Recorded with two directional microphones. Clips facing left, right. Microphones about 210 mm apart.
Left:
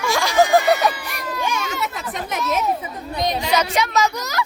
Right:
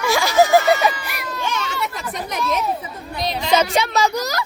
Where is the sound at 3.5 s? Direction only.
30° right (ahead or behind).